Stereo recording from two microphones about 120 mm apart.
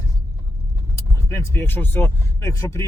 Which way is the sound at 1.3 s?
20° left (ahead or behind).